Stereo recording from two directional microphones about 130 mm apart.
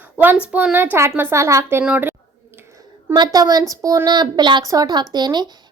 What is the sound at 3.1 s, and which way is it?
A woman's voice, 30° right (ahead or behind).